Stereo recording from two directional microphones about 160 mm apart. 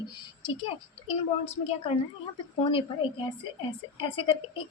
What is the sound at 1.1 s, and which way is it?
A woman's voice, 40° left (ahead or behind).